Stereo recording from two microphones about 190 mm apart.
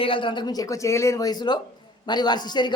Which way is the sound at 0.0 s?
25° left (ahead or behind).